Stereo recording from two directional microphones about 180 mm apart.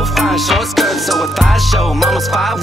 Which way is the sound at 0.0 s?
Centre (ahead or behind).